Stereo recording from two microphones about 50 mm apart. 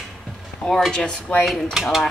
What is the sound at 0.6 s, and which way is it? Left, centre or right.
Speech, centre.